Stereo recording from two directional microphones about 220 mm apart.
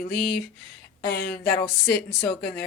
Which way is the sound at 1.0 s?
45° left (ahead or behind).